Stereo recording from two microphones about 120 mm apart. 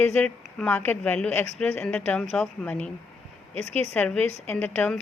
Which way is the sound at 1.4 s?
65° right (ahead or behind).